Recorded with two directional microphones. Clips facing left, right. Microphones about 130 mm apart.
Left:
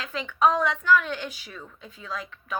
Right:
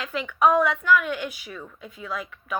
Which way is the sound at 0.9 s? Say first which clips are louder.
Left 1 dB; 30° left (ahead or behind).